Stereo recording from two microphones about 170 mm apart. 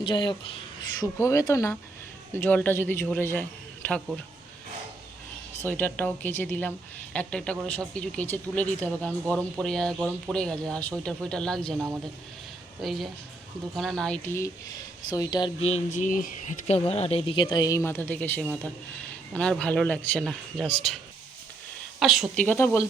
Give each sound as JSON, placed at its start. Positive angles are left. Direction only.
{"t": 0.0, "sound": "speech", "side_deg": 30}
{"t": 5.6, "sound": "speech", "side_deg": 10}
{"t": 12.8, "sound": "speech", "side_deg": 0}
{"t": 15.6, "sound": "speech", "side_deg": 45}
{"t": 22.4, "sound": "speech", "side_deg": 15}